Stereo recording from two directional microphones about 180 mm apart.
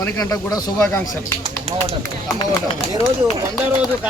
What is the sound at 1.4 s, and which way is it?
Speech, 30° right (ahead or behind).